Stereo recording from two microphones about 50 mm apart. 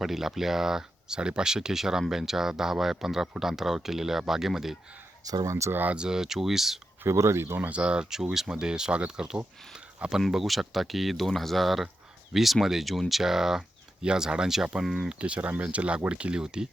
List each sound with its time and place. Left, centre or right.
0.0 s speech: centre
5.5 s speech: right
5.9 s speech: centre
7.1 s speech: right
7.7 s speech: right
8.1 s speech: centre
15.2 s speech: right